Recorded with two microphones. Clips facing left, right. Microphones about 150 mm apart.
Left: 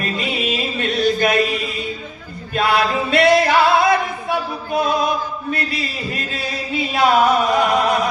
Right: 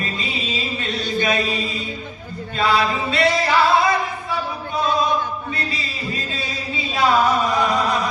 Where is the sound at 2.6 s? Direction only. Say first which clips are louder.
Left 2 dB; 60° left (ahead or behind).